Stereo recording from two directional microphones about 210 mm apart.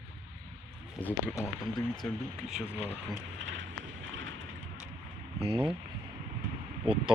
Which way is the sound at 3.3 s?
60° right (ahead or behind).